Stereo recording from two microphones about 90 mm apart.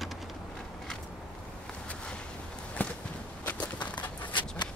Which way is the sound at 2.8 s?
20° left (ahead or behind).